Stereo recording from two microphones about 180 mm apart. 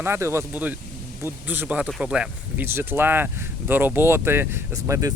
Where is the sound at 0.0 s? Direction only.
15° right (ahead or behind).